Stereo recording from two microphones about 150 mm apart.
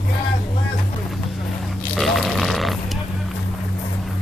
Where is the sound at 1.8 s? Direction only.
Centre (ahead or behind).